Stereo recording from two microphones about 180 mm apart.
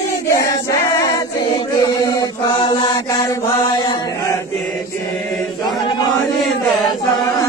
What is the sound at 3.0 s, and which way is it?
Mantra, 20° left (ahead or behind).